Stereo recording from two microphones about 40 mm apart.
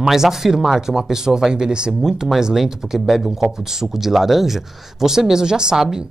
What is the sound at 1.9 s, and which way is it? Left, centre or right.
Speech, centre.